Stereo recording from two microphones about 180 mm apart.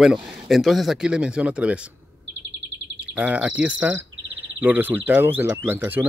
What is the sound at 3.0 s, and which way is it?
Speech, 10° right (ahead or behind).